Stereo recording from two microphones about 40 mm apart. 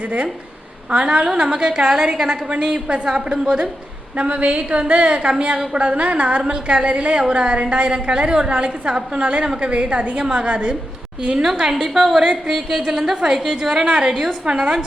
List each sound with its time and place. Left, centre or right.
0.9 s a woman's voice: right
11.6 s a woman's voice: centre